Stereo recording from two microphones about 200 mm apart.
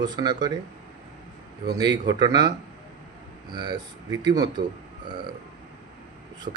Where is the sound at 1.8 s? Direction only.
20° right (ahead or behind).